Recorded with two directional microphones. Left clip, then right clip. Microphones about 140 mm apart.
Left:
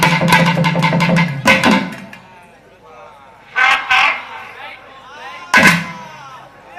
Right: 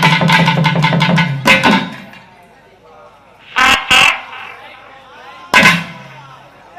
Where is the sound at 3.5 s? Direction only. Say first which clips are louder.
Right 2 dB; 40° right (ahead or behind).